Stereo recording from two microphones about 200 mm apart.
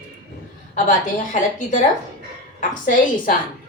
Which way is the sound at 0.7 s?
40° left (ahead or behind).